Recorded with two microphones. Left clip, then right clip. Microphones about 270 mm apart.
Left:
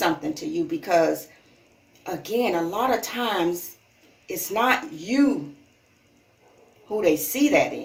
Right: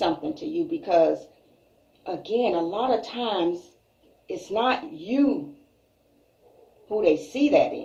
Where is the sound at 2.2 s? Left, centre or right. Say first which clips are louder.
Even; left.